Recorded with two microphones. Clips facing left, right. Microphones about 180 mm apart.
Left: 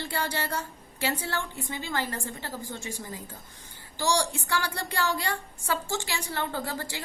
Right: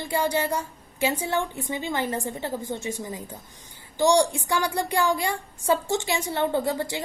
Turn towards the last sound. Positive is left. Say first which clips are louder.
# right 8 dB
turn(degrees=-20)  # may be behind; listen again after turning